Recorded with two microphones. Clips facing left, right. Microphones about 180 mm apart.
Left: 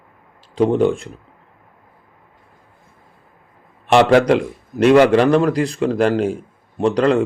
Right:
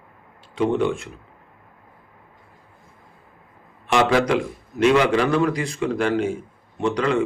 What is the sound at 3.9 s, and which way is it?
Speech, 45° left (ahead or behind).